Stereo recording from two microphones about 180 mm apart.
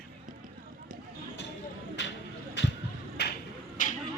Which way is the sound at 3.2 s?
70° left (ahead or behind).